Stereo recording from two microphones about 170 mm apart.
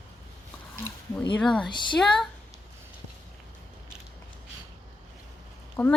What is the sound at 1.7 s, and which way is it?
Speech, 25° left (ahead or behind).